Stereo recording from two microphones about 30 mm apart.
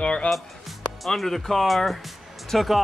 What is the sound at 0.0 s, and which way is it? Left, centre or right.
Speech, left.